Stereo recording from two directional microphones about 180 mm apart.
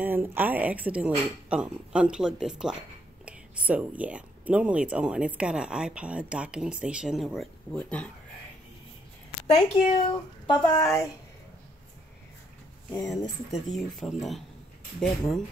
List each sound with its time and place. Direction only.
0.0 s speech: 10° right (ahead or behind); by 8.1 s 5° left (ahead or behind)
9.6 s a child's voice: 30° left (ahead or behind)
13.5 s speech: centre (ahead or behind)